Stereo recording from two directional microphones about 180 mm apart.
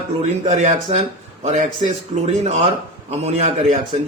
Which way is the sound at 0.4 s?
40° right (ahead or behind).